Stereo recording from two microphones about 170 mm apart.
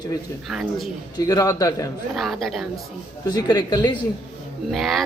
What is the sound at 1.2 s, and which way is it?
Speech, 20° left (ahead or behind).